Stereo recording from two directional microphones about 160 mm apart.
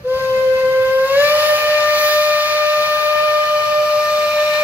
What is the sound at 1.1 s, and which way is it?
Steam whistle, 10° right (ahead or behind).